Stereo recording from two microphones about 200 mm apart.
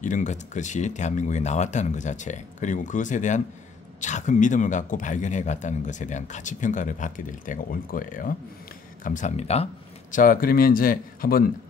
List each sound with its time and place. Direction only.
0.0 s a man's voice: 40° left (ahead or behind)
10.1 s a man's voice: 45° left (ahead or behind)